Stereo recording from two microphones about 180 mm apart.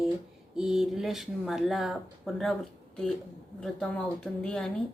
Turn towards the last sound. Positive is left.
turn(degrees=5)  # may be behind; listen again after turning